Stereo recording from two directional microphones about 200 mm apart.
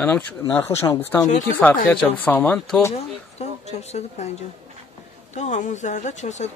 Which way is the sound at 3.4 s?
35° left (ahead or behind).